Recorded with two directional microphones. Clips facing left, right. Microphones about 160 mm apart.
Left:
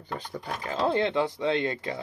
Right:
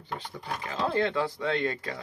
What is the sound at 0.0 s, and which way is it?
Speech, 40° left (ahead or behind).